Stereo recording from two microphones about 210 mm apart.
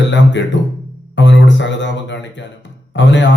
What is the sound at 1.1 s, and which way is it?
A man's voice, 60° left (ahead or behind).